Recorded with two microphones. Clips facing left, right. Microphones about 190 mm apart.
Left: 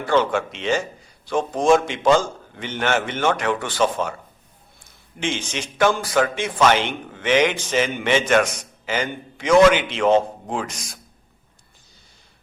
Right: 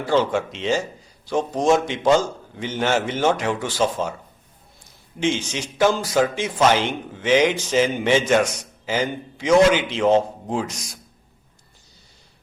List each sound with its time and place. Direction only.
0.0 s a man's voice: 60° left (ahead or behind)